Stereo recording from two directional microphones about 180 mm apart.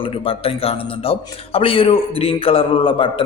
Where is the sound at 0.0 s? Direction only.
30° left (ahead or behind).